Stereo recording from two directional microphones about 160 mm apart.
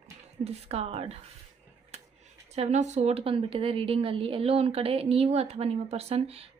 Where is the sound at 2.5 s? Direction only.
45° right (ahead or behind).